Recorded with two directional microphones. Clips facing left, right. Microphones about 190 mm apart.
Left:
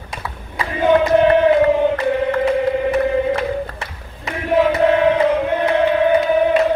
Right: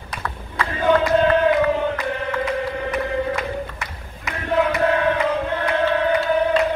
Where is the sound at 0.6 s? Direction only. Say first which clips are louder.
Left 3 dB; 20° left (ahead or behind).